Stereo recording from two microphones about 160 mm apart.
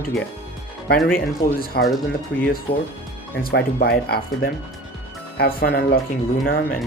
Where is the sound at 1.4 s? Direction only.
70° left (ahead or behind).